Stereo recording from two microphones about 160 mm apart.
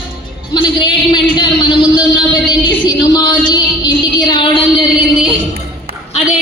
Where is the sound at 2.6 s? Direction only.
30° left (ahead or behind).